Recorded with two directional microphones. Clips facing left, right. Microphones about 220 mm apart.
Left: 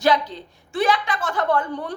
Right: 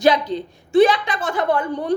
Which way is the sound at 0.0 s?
15° right (ahead or behind).